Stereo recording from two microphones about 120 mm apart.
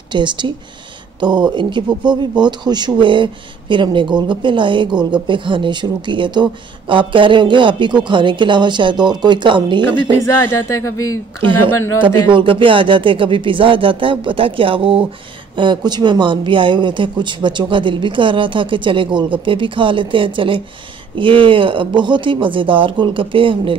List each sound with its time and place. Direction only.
0.1 s speech: 40° right (ahead or behind)
11.4 s speech: 45° right (ahead or behind)